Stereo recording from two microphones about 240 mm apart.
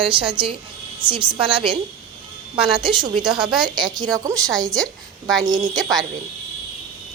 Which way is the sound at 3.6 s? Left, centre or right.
Centre.